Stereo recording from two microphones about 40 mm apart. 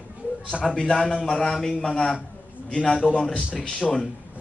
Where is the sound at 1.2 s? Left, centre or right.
Centre.